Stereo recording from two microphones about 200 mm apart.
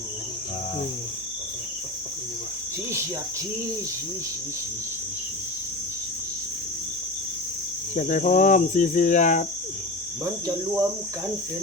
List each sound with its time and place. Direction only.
7.9 s speech: 40° left (ahead or behind)